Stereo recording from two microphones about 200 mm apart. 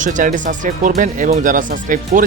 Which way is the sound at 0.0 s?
40° right (ahead or behind).